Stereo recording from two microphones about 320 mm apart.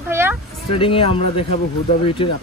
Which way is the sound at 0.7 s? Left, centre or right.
Centre.